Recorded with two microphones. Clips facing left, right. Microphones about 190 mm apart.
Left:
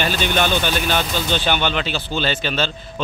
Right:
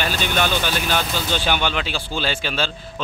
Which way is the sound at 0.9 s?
5° right (ahead or behind).